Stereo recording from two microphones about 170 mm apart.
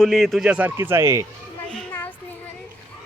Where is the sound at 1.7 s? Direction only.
5° left (ahead or behind).